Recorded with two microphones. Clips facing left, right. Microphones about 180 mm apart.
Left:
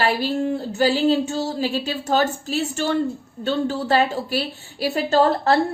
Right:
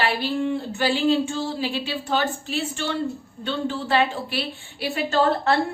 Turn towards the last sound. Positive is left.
turn(degrees=35)  # may be behind; listen again after turning